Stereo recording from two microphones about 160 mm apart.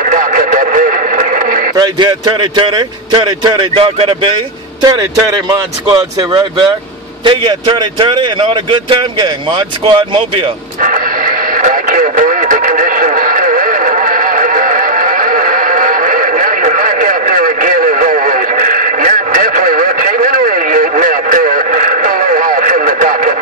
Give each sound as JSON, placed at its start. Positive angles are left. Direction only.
{"t": 0.0, "sound": "radio", "side_deg": -55}
{"t": 1.8, "sound": "a man's voice", "side_deg": -25}
{"t": 10.8, "sound": "radio", "side_deg": -55}